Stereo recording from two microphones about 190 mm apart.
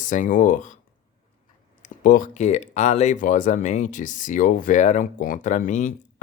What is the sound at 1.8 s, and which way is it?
Speech, 45° left (ahead or behind).